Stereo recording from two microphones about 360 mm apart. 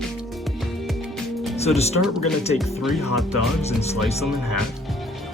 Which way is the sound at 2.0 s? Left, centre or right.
Centre.